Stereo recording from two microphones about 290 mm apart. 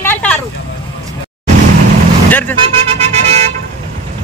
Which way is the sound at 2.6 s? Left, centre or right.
Right.